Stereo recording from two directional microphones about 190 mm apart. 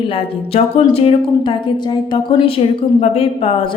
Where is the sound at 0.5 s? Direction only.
30° left (ahead or behind).